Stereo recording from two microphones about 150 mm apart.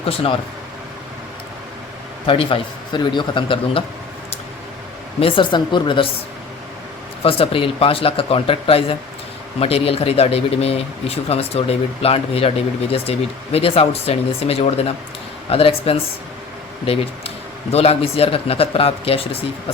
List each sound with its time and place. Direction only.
0.0 s speech: 40° left (ahead or behind)
2.2 s speech: 35° left (ahead or behind)
5.2 s speech: 35° left (ahead or behind)
7.2 s speech: 40° left (ahead or behind)